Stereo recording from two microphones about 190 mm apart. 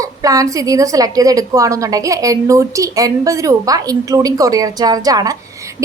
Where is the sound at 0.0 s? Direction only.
15° right (ahead or behind).